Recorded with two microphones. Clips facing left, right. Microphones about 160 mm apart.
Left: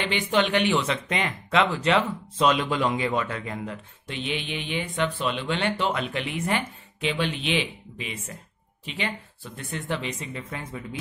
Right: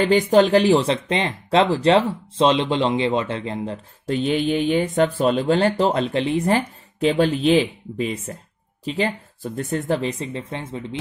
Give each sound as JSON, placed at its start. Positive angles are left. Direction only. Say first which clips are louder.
{"t": 0.0, "sound": "speech", "louder": "right 9 dB", "side_deg": -40}